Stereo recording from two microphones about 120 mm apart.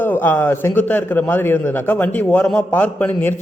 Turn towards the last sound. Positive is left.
turn(degrees=15)  # may be behind; listen again after turning